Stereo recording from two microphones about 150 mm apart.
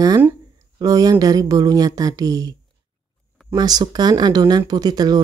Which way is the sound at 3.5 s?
25° right (ahead or behind).